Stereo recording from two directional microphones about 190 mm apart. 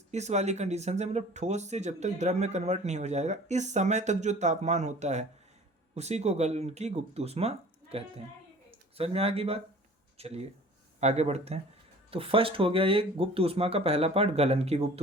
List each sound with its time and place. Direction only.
0.1 s speech: 35° right (ahead or behind)